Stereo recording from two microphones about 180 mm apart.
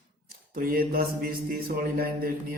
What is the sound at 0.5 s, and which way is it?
Speech, 55° right (ahead or behind).